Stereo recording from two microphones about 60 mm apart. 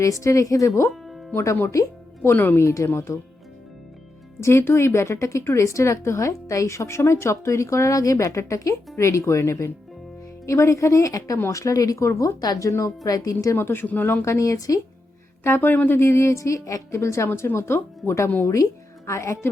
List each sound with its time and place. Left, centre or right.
0.0 s a woman's voice: left
0.9 s music: centre
1.7 s music: left
2.3 s speech: left
2.6 s a woman's voice: left
4.4 s a woman's voice: left
13.1 s speech: left
13.6 s speech: left
14.3 s a woman's voice: left
15.4 s speech: left
16.0 s a woman's voice: left